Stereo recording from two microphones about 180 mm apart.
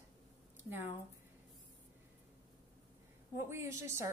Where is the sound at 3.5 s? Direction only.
15° right (ahead or behind).